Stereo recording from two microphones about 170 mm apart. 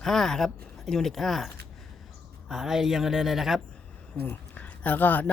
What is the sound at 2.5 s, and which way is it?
Speech, centre (ahead or behind).